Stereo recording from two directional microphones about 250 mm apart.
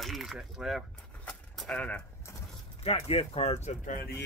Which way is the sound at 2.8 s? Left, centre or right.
Left.